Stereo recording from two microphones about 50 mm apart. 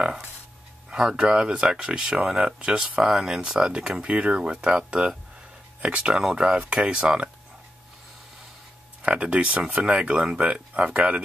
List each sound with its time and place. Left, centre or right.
0.8 s speech: centre
9.0 s speech: right